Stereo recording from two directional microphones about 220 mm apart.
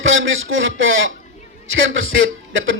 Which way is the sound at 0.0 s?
60° right (ahead or behind).